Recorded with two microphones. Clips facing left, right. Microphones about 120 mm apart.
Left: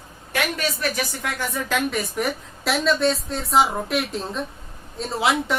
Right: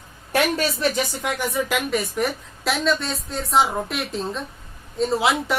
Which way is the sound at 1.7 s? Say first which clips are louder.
Right 1 dB; centre (ahead or behind).